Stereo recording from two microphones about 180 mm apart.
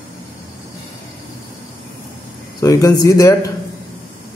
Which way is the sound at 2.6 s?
20° left (ahead or behind).